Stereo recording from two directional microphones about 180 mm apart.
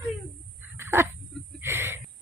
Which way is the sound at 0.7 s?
15° right (ahead or behind).